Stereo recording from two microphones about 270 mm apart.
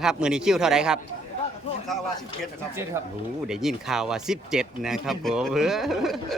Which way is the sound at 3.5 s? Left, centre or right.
Centre.